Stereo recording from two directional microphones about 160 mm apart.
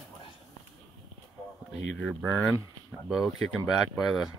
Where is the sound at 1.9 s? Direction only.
5° left (ahead or behind).